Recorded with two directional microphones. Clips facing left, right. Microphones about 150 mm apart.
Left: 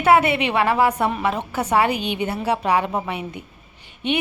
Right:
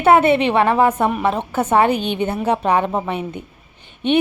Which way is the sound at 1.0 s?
20° right (ahead or behind).